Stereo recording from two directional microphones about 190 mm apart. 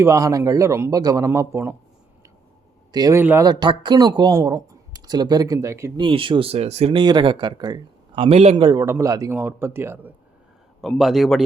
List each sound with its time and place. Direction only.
0.0 s a man's voice: 15° right (ahead or behind)
2.9 s speech: 15° right (ahead or behind)
6.0 s speech: 25° right (ahead or behind); by 10.1 s 10° right (ahead or behind)
10.8 s a man's voice: centre (ahead or behind)